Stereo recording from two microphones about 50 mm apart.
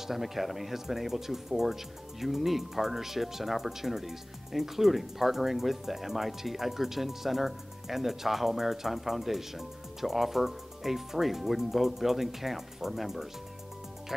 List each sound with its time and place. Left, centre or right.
0.0 s speech: centre